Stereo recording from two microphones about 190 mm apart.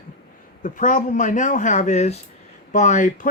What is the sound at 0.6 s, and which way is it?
Speech, 45° left (ahead or behind).